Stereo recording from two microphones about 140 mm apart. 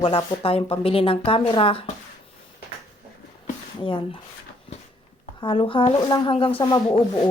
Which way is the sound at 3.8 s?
40° left (ahead or behind).